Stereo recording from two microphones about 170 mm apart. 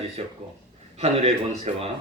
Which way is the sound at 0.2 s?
35° right (ahead or behind).